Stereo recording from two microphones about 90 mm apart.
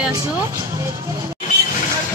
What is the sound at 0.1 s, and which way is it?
Speech, 35° right (ahead or behind).